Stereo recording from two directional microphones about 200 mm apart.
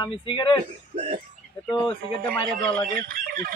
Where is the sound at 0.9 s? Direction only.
30° right (ahead or behind).